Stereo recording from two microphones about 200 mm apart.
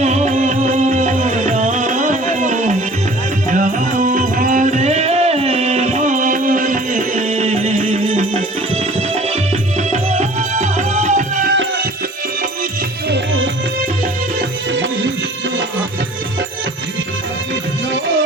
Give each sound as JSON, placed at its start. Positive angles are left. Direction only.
{"t": 0.0, "sound": "music", "side_deg": -35}
{"t": 9.9, "sound": "music", "side_deg": -35}